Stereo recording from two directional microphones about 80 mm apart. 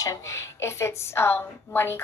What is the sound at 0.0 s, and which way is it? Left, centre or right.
A woman's voice, left.